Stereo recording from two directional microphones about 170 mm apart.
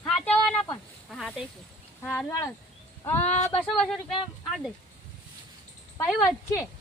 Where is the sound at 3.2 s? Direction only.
40° left (ahead or behind).